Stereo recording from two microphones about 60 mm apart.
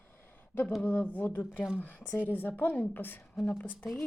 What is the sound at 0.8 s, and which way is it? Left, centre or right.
Speech, left.